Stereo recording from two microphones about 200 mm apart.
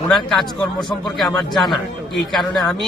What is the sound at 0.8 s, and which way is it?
Speech, centre (ahead or behind).